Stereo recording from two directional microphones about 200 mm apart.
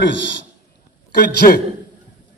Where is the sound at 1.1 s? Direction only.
55° left (ahead or behind).